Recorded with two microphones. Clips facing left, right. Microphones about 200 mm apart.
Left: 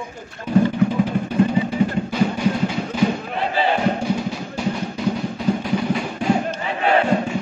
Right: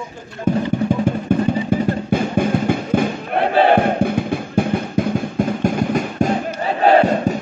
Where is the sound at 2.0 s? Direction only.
50° right (ahead or behind).